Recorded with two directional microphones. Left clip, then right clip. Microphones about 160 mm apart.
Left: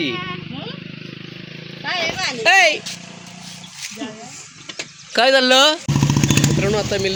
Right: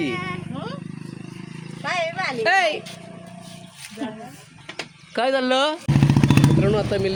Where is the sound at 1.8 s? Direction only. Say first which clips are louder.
Left 2 dB; 30° right (ahead or behind).